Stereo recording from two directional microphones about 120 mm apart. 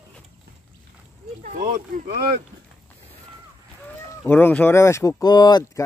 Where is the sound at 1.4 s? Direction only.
90° right.